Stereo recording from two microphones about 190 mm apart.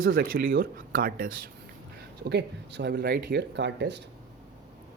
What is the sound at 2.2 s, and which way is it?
Speech, 65° right (ahead or behind).